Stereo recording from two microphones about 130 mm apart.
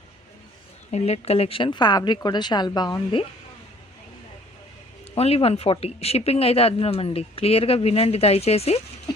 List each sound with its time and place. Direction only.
0.9 s a woman's voice: 55° left (ahead or behind); by 3.2 s 40° left (ahead or behind)
5.1 s speech: 50° left (ahead or behind)